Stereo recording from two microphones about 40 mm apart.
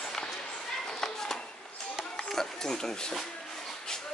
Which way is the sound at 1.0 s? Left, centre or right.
Centre.